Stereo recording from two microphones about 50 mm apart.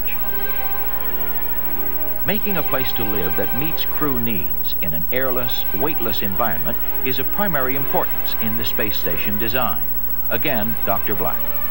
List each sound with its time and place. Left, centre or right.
2.2 s speech: left